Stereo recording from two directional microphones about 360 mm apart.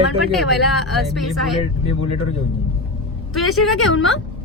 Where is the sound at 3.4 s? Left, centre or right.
Left.